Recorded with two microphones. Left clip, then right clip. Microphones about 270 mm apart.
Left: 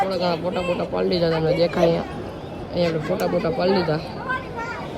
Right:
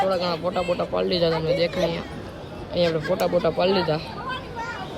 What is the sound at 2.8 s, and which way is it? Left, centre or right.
Speech, centre.